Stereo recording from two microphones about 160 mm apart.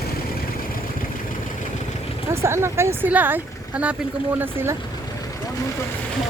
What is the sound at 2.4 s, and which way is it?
Speech, 15° right (ahead or behind).